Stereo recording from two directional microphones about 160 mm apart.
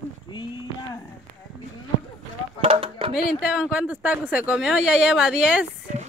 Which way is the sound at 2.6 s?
35° right (ahead or behind).